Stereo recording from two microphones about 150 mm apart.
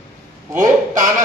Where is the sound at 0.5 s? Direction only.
60° right (ahead or behind).